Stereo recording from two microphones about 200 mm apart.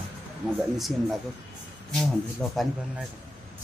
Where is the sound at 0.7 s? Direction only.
Centre (ahead or behind).